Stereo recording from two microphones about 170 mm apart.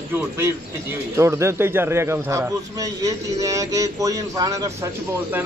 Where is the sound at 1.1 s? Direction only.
15° right (ahead or behind).